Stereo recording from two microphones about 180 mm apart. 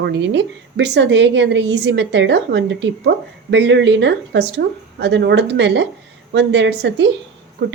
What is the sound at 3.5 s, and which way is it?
A woman's voice, 80° right.